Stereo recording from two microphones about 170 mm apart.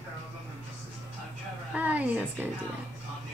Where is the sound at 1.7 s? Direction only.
10° right (ahead or behind).